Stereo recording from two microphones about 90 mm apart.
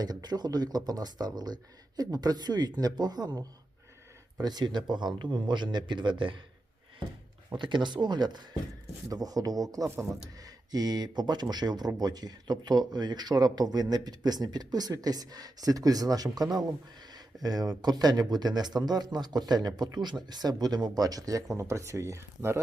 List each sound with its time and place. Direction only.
0.0 s speech: 50° right (ahead or behind); by 6.4 s 65° right (ahead or behind)
7.5 s speech: 60° right (ahead or behind)
9.0 s speech: 45° right (ahead or behind)